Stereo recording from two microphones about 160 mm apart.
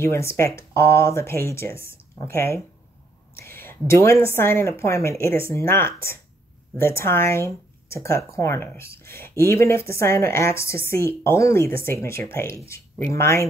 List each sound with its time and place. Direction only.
0.0 s a woman's voice: 15° left (ahead or behind)